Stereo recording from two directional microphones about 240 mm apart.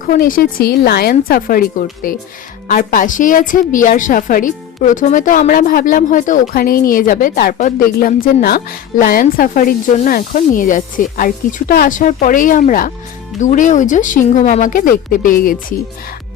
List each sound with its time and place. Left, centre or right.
0.0 s a woman's voice: left